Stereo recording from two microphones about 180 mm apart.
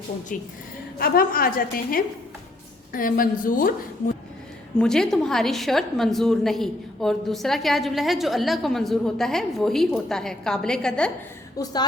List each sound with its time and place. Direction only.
0.9 s a woman's voice: 55° left (ahead or behind)
4.8 s a woman's voice: 5° left (ahead or behind)